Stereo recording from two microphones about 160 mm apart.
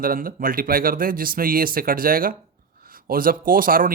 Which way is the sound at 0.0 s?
65° right (ahead or behind).